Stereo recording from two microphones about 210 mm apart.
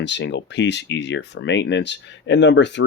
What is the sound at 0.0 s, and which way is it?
Speech, 55° left (ahead or behind).